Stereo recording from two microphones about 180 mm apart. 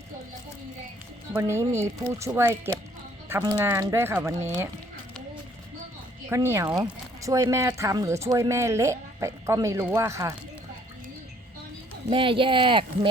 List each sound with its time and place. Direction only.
1.4 s speech: 15° right (ahead or behind)
6.2 s speech: 15° right (ahead or behind)
12.1 s speech: 30° right (ahead or behind)